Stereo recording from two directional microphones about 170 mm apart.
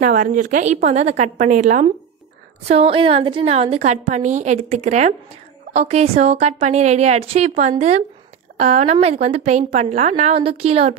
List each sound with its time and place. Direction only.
0.0 s a woman's voice: 50° right (ahead or behind)
2.7 s a woman's voice: 35° right (ahead or behind)